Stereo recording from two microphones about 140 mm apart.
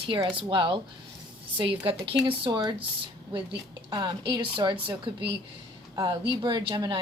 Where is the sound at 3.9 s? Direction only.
30° right (ahead or behind).